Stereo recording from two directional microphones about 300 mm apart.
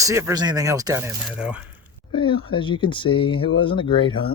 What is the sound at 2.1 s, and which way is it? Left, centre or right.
Speech, centre.